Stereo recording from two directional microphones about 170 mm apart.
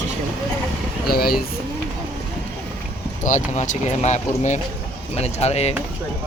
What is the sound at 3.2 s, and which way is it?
Speech, 45° left (ahead or behind).